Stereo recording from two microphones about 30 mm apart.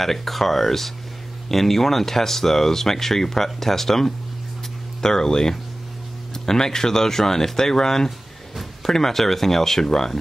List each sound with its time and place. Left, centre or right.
0.0 s speech: centre
5.0 s speech: left